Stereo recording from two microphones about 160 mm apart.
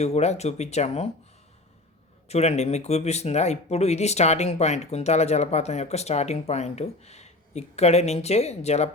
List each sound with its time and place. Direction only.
0.0 s speech: 45° left (ahead or behind)
2.3 s speech: 45° left (ahead or behind)